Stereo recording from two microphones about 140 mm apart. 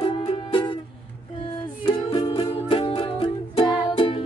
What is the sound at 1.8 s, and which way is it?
Music, 30° left (ahead or behind).